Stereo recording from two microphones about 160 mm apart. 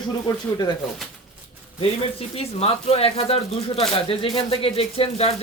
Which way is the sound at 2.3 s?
40° left (ahead or behind).